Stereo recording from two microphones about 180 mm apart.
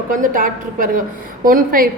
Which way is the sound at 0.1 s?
50° right (ahead or behind).